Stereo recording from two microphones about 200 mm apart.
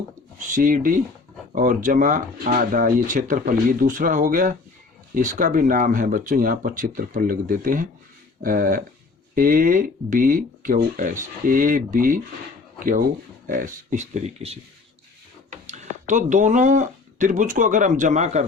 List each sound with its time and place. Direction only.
0.3 s speech: 40° right (ahead or behind)
15.6 s speech: 35° right (ahead or behind)